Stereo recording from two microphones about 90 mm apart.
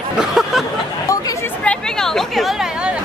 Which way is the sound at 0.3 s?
5° right (ahead or behind).